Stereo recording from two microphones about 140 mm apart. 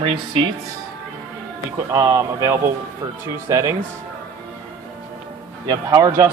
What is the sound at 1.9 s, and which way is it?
Speech, 25° right (ahead or behind).